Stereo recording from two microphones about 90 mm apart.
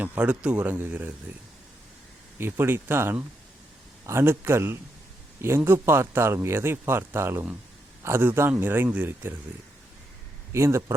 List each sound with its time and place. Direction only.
0.0 s a man's voice: 15° right (ahead or behind)
2.4 s speech: 25° right (ahead or behind)
10.5 s a man's voice: 30° right (ahead or behind)